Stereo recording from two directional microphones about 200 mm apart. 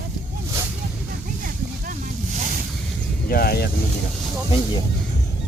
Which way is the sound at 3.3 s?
50° left (ahead or behind).